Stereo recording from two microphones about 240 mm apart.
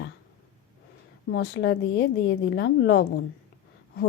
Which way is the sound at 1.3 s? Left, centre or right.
Left.